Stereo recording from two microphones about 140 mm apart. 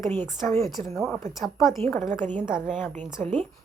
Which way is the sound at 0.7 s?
Centre (ahead or behind).